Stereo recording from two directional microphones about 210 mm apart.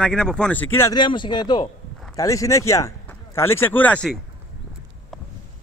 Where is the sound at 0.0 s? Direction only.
5° left (ahead or behind).